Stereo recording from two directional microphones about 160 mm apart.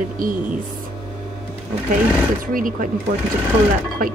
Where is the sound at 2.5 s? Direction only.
60° right (ahead or behind).